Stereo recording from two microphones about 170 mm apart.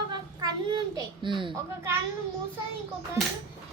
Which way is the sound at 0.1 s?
25° right (ahead or behind).